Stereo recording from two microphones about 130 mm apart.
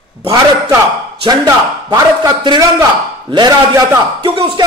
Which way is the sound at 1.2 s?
30° right (ahead or behind).